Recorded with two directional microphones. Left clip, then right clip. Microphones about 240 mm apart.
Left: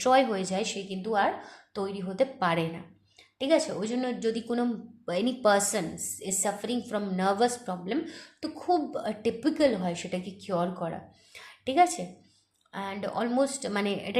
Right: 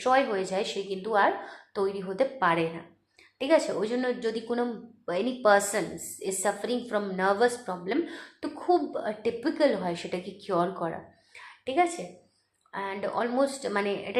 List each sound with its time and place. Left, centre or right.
0.0 s a woman's voice: left
3.3 s a woman's voice: left
11.3 s a sound: left
12.7 s a woman's voice: left